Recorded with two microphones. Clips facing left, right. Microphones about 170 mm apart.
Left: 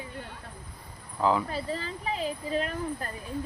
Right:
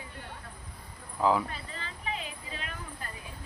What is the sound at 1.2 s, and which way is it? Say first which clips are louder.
Speech: left 1 dB; centre (ahead or behind).